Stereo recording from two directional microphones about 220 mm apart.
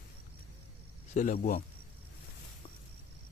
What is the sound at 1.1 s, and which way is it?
Speech, 35° left (ahead or behind).